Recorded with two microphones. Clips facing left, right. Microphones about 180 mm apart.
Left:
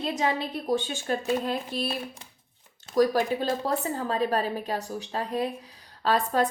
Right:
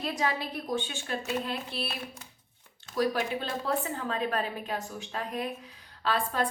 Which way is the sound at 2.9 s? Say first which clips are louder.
Left 6 dB; 40° left (ahead or behind).